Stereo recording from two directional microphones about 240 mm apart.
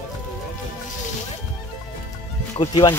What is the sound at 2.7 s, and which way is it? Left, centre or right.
Speech, centre.